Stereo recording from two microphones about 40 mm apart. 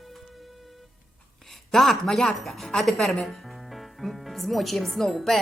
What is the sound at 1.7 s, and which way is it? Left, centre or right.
Speech, centre.